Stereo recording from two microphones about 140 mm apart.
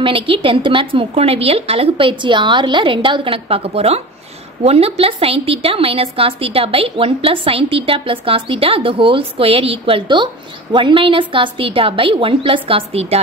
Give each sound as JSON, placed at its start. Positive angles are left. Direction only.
{"t": 0.0, "sound": "a woman's voice", "side_deg": -40}